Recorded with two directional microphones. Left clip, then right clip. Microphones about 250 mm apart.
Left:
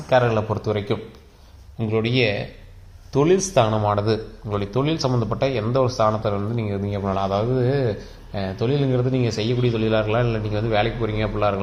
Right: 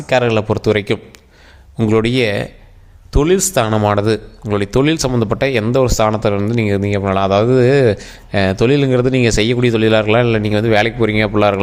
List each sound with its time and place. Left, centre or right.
0.1 s speech: right
3.1 s speech: right